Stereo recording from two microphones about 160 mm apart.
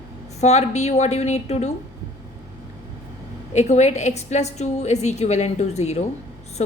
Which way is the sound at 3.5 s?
45° left (ahead or behind).